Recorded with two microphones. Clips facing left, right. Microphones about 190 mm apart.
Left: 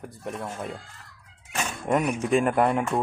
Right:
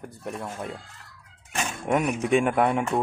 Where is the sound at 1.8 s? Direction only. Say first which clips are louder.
Even; centre (ahead or behind).